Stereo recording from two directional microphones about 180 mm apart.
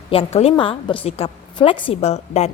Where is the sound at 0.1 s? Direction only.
30° left (ahead or behind).